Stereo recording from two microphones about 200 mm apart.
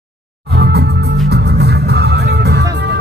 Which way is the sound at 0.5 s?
55° right (ahead or behind).